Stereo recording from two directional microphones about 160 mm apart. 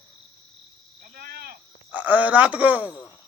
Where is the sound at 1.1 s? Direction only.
75° right (ahead or behind).